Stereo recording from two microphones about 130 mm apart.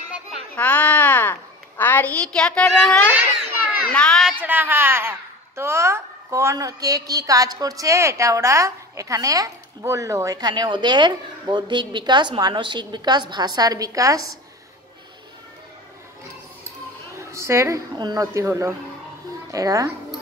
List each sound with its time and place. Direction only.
0.6 s a woman's voice: 10° left (ahead or behind)
4.4 s a woman's voice: 15° right (ahead or behind)
17.2 s a woman's voice: 20° right (ahead or behind)